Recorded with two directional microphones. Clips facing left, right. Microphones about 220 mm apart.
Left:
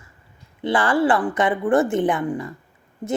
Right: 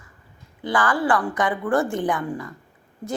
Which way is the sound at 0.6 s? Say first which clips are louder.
Left 4 dB; 25° left (ahead or behind).